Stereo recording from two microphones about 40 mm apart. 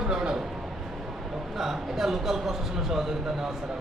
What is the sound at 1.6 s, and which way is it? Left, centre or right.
Speech, centre.